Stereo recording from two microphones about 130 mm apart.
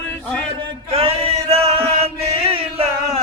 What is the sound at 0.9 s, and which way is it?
Chant, 50° right (ahead or behind).